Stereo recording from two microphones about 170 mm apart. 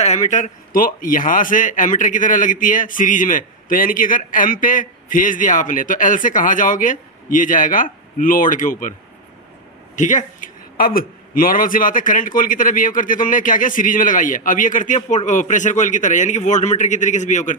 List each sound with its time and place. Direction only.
0.0 s a man's voice: 40° left (ahead or behind)